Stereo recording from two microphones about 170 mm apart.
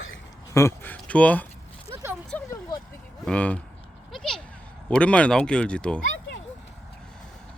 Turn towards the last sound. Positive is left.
turn(degrees=5)  # may be behind; listen again after turning